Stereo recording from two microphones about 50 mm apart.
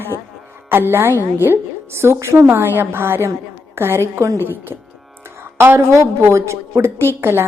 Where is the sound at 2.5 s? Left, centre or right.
Right.